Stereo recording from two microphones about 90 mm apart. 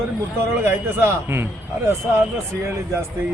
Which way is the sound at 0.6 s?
25° right (ahead or behind).